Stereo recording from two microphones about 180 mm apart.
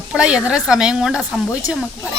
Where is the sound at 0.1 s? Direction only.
5° right (ahead or behind).